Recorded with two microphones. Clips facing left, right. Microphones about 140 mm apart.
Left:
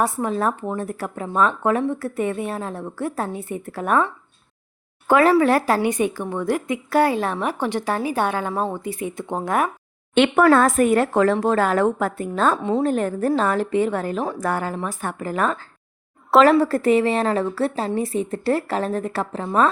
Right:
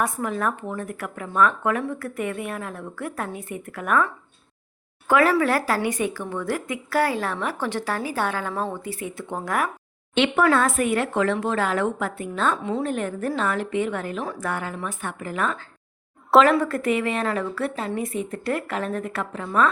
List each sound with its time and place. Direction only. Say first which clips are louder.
0.0 s a woman's voice: left 4 dB; 30° left (ahead or behind)
10.2 s speech: left 5 dB; 45° left (ahead or behind)